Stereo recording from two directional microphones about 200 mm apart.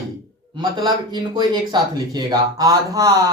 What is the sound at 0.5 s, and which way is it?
Speech, 20° right (ahead or behind).